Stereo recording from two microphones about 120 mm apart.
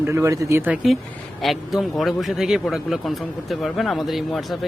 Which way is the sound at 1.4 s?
Centre (ahead or behind).